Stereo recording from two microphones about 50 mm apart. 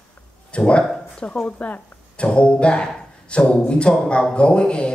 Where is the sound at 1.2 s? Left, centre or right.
Left.